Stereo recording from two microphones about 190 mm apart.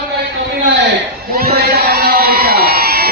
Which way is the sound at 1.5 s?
55° right (ahead or behind).